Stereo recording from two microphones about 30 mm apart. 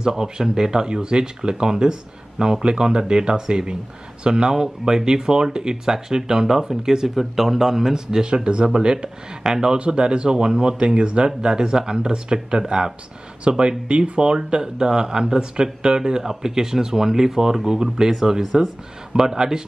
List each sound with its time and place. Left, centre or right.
0.0 s speech: centre
7.2 s speech: centre
9.8 s speech: right